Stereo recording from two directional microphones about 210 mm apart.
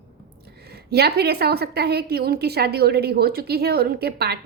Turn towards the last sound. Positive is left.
turn(degrees=-50)  # may be behind; listen again after turning